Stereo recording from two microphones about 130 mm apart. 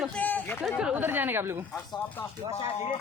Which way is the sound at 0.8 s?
5° right (ahead or behind).